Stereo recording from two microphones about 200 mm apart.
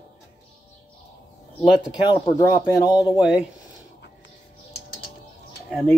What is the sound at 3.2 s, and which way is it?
Speech, 5° right (ahead or behind).